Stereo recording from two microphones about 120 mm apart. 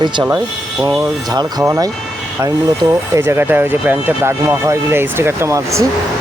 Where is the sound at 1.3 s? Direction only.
30° right (ahead or behind).